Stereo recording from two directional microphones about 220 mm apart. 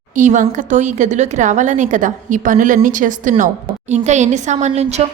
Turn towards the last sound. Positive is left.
turn(degrees=-30)  # may be behind; listen again after turning